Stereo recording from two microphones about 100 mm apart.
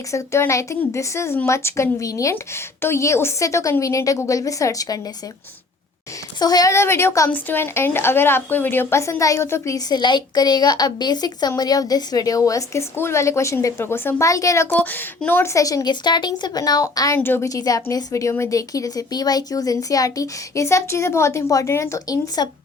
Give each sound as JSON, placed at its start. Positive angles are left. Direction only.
{"t": 0.1, "sound": "a woman's voice", "side_deg": 30}
{"t": 6.4, "sound": "speech", "side_deg": 40}
{"t": 6.7, "sound": "a woman's voice", "side_deg": 25}
{"t": 9.9, "sound": "speech", "side_deg": 50}
{"t": 14.7, "sound": "a woman's voice", "side_deg": 15}
{"t": 15.5, "sound": "speech", "side_deg": 35}
{"t": 17.2, "sound": "a woman's voice", "side_deg": 20}
{"t": 17.4, "sound": "speech", "side_deg": 35}